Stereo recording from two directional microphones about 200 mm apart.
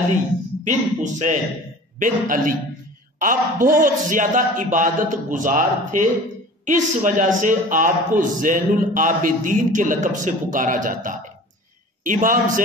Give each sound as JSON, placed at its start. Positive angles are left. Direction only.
{"t": 0.7, "sound": "a man's voice", "side_deg": -35}